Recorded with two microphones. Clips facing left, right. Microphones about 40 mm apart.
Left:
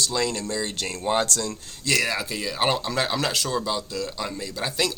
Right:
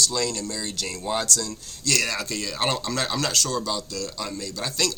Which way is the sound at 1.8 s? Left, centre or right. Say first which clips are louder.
Left 1 dB; centre.